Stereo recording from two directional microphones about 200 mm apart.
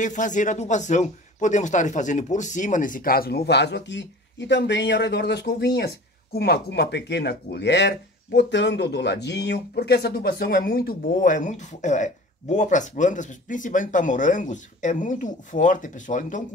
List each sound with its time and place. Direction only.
0.0 s speech: 40° left (ahead or behind)